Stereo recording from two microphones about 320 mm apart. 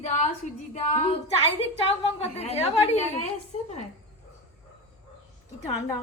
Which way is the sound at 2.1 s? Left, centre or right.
Centre.